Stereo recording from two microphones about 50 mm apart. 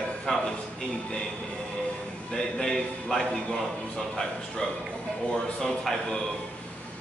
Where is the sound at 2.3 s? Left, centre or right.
Centre.